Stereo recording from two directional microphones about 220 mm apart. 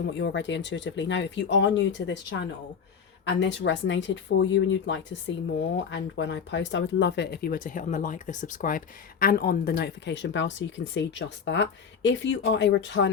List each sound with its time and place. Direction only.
0.0 s speech: 55° left (ahead or behind)